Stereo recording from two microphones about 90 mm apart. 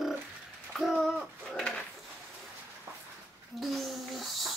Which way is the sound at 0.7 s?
Centre (ahead or behind).